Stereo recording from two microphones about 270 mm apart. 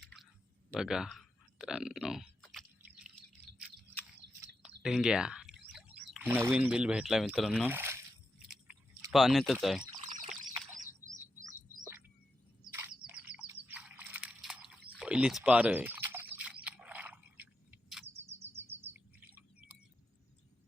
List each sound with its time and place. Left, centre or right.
0.7 s a sound: centre
4.4 s chirp: centre
6.1 s speech: centre
9.1 s speech: centre
9.9 s pour: right
10.8 s chirp: right
12.6 s chirp: centre
14.9 s a sound: centre